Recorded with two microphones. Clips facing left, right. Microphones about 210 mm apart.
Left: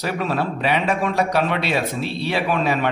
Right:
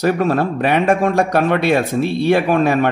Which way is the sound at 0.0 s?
45° right (ahead or behind).